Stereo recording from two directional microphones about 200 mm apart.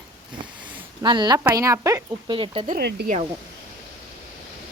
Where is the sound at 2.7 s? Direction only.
55° right (ahead or behind).